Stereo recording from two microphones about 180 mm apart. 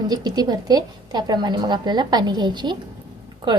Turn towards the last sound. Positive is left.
turn(degrees=-25)  # may be behind; listen again after turning